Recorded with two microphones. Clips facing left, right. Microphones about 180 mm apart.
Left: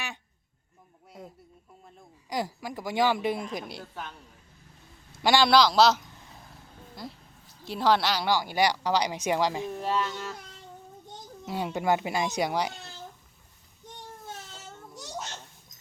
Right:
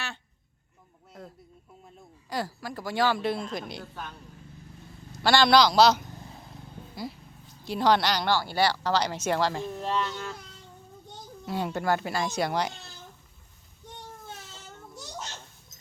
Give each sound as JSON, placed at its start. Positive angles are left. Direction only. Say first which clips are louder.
{"t": 2.3, "sound": "speech", "louder": "left 1 dB", "side_deg": 15}
{"t": 5.2, "sound": "a man's voice", "louder": "even", "side_deg": 10}
{"t": 5.5, "sound": "speech", "louder": "right 2 dB", "side_deg": 0}
{"t": 7.6, "sound": "speech", "louder": "right 1 dB", "side_deg": 0}
{"t": 11.4, "sound": "speech", "louder": "left 1 dB", "side_deg": 10}